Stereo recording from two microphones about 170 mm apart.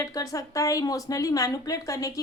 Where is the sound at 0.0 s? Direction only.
20° left (ahead or behind).